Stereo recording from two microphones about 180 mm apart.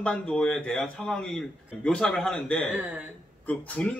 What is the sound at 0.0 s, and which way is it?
A man's voice, 5° left (ahead or behind).